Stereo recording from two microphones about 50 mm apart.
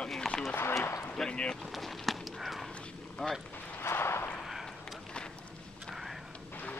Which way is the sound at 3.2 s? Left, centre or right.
Centre.